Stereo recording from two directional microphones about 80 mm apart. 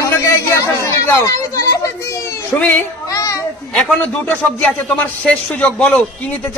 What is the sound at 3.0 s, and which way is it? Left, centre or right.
Children playing, left.